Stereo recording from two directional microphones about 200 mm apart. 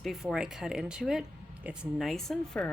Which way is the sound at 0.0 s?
Centre (ahead or behind).